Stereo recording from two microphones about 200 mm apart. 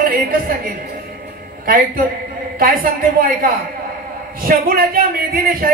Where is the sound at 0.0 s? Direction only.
45° right (ahead or behind).